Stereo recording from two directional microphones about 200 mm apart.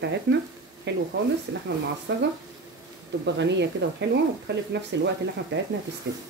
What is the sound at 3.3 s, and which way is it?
Speech, 60° right (ahead or behind).